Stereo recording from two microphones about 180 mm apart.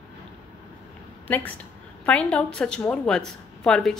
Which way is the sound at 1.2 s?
10° left (ahead or behind).